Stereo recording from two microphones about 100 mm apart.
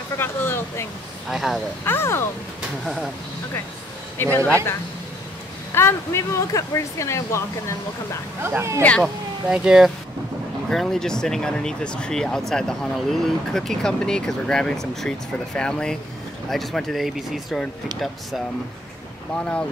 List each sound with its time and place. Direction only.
0.2 s speech: 25° left (ahead or behind)
1.3 s speech: centre (ahead or behind)
1.9 s speech: 25° left (ahead or behind)
4.2 s speech: 20° left (ahead or behind)
5.7 s speech: 25° left (ahead or behind)
8.4 s speech: 25° right (ahead or behind)
9.0 s speech: 5° right (ahead or behind)
19.3 s speech: 10° left (ahead or behind)